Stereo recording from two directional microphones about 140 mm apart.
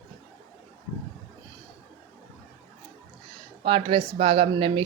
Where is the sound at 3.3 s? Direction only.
35° right (ahead or behind).